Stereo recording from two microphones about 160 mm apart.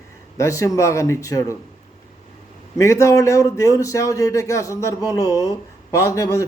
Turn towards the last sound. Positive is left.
turn(degrees=20)  # may be behind; listen again after turning